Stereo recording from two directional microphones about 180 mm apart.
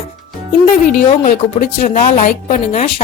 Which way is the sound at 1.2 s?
55° left (ahead or behind).